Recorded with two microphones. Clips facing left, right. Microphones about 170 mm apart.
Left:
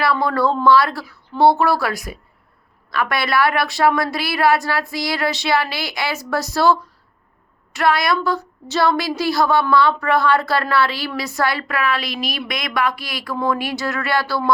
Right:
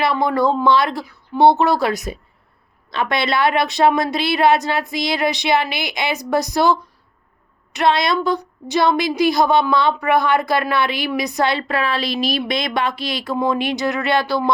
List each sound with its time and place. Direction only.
0.0 s a woman's voice: 20° right (ahead or behind)